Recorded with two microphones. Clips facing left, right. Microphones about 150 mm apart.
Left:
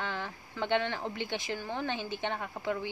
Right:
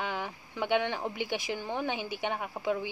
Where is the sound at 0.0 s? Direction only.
15° right (ahead or behind).